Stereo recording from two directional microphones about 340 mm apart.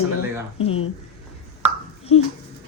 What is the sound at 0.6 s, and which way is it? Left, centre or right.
Speech, left.